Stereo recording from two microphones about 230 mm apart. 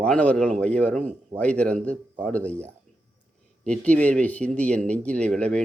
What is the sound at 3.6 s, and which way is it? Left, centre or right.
Speech, centre.